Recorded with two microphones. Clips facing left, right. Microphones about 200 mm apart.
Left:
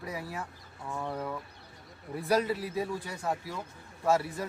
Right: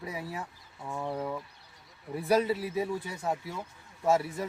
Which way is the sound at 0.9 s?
5° right (ahead or behind).